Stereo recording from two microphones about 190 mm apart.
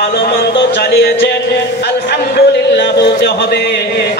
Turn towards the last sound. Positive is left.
turn(degrees=60)  # may be behind; listen again after turning